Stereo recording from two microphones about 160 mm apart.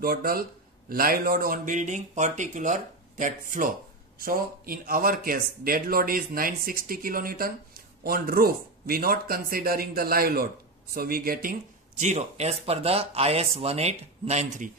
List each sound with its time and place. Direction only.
0.0 s speech: 65° right (ahead or behind)
4.2 s speech: 65° right (ahead or behind)
12.0 s speech: 45° right (ahead or behind)